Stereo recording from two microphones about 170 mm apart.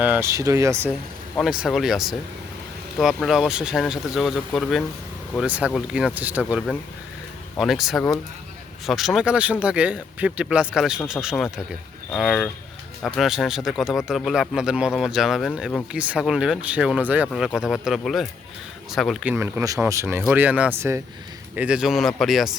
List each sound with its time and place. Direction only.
0.0 s speech: 10° right (ahead or behind)
1.4 s speech: centre (ahead or behind)